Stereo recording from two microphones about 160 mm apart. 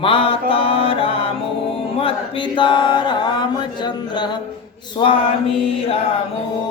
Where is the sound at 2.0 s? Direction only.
35° left (ahead or behind).